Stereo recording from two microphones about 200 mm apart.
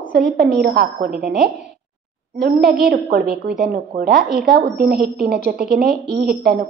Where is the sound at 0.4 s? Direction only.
55° right (ahead or behind).